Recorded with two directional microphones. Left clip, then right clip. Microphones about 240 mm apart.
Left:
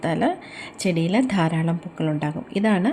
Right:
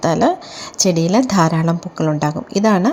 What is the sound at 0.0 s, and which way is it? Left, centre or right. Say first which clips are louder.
Speech: right 8 dB; centre.